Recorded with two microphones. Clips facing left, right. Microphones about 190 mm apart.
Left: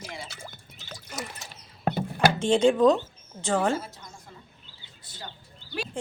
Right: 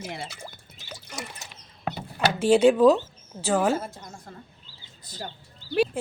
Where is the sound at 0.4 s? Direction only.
10° right (ahead or behind).